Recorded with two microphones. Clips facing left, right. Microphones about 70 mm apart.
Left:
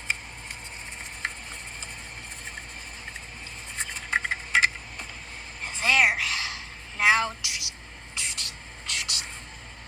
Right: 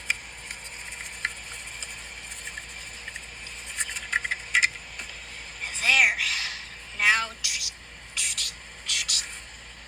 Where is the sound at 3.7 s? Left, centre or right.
Left.